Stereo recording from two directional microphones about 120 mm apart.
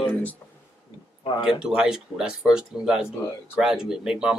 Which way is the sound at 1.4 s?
5° right (ahead or behind).